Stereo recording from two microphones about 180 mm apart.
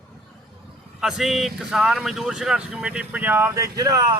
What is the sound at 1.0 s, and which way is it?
Speech, centre (ahead or behind).